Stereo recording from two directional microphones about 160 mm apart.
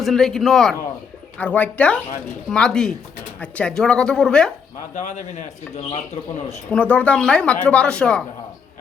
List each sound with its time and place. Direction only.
0.0 s speech: centre (ahead or behind)
4.9 s speech: 50° left (ahead or behind)
6.7 s speech: 10° left (ahead or behind)